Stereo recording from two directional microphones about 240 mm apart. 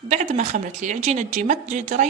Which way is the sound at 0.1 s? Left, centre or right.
Right.